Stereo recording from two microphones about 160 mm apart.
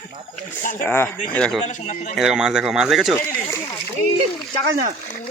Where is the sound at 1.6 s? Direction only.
50° left (ahead or behind).